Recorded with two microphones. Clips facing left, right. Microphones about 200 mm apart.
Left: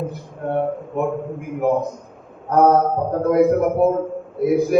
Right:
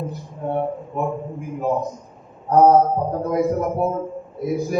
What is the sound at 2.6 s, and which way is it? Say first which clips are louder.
A man's voice: right 1 dB; 60° left (ahead or behind).